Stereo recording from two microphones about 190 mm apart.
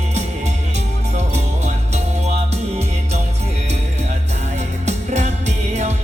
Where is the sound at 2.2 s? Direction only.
35° right (ahead or behind).